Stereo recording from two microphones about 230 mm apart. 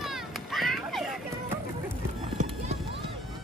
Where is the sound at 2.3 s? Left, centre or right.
Right.